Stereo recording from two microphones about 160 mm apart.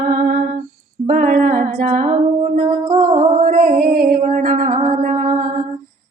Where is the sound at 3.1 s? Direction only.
55° right (ahead or behind).